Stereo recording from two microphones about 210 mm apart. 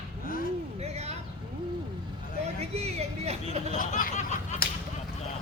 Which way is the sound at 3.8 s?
40° left (ahead or behind).